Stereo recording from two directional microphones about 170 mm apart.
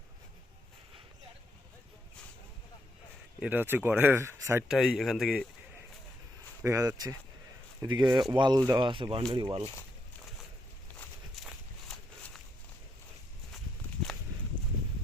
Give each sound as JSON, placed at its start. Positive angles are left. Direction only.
{"t": 3.4, "sound": "speech", "side_deg": -10}
{"t": 4.7, "sound": "speech", "side_deg": 0}
{"t": 6.6, "sound": "speech", "side_deg": -15}
{"t": 11.9, "sound": "a sound", "side_deg": 0}